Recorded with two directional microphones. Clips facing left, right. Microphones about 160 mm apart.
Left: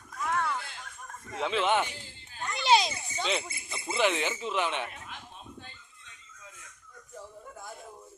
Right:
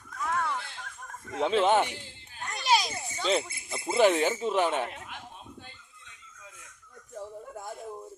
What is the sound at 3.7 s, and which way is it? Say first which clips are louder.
Speech: right 5 dB; 45° right (ahead or behind).